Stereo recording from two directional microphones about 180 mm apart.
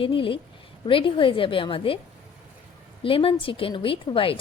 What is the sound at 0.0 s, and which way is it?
A woman's voice, 30° left (ahead or behind).